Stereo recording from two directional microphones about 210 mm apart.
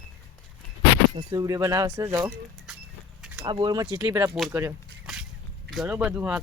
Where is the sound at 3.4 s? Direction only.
20° right (ahead or behind).